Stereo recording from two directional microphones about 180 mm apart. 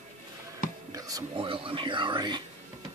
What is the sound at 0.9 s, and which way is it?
Whispering, 20° right (ahead or behind).